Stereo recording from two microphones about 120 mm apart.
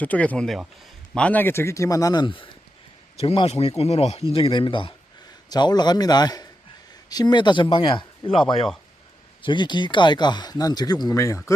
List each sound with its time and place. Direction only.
0.0 s a man's voice: 10° left (ahead or behind); by 2.5 s 45° left (ahead or behind)
3.2 s speech: 55° left (ahead or behind); by 8.4 s 40° left (ahead or behind)
9.4 s speech: 40° left (ahead or behind); by 11.5 s 25° left (ahead or behind)